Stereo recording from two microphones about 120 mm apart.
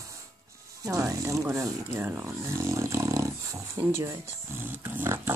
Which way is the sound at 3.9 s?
20° right (ahead or behind).